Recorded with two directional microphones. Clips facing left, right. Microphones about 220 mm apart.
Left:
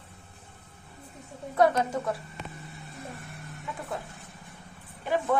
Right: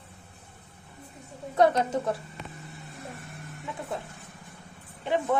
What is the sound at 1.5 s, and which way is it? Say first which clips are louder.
Speech: right 1 dB; 20° right (ahead or behind).